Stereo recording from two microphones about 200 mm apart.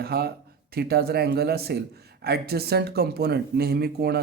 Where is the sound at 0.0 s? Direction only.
50° right (ahead or behind).